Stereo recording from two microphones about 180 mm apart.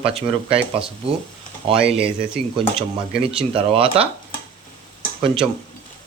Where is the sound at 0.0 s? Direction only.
30° right (ahead or behind).